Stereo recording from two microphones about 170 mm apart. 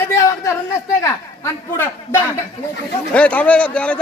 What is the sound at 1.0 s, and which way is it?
A man's voice, 15° left (ahead or behind).